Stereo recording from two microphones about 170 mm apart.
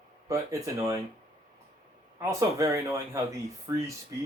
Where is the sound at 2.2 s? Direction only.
20° right (ahead or behind).